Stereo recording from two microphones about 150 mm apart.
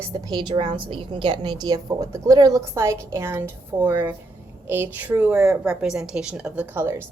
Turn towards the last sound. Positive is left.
turn(degrees=-15)  # may be behind; listen again after turning